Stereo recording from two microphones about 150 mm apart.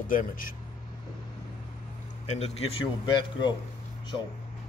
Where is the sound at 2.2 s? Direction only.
45° left (ahead or behind).